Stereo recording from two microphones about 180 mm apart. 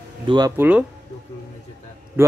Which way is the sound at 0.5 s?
10° right (ahead or behind).